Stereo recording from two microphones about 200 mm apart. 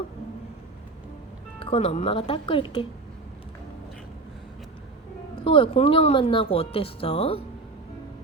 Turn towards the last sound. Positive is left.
turn(degrees=30)  # may be behind; listen again after turning